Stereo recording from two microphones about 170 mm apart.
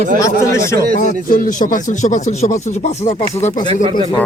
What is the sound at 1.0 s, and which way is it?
Speech, 55° left (ahead or behind).